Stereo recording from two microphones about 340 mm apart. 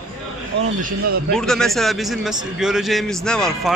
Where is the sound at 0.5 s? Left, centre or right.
Right.